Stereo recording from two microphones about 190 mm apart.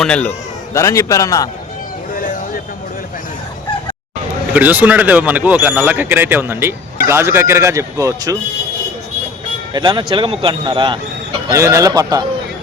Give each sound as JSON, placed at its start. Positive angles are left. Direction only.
{"t": 0.0, "sound": "speech", "side_deg": 5}
{"t": 4.5, "sound": "speech", "side_deg": -10}
{"t": 9.7, "sound": "speech", "side_deg": -25}